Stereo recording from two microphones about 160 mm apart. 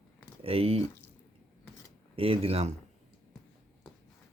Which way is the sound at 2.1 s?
35° right (ahead or behind).